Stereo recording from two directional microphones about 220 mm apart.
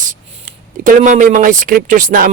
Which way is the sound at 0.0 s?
35° right (ahead or behind).